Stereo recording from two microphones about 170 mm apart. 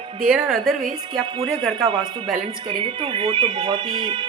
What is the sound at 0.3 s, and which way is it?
Speech, 5° right (ahead or behind).